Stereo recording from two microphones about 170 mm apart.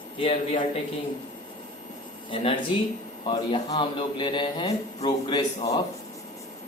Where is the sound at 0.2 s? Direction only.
30° left (ahead or behind).